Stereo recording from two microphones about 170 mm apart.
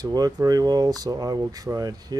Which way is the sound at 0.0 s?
20° right (ahead or behind).